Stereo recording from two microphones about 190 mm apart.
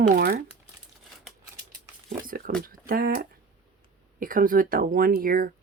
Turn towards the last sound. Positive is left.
turn(degrees=-50)  # may be behind; listen again after turning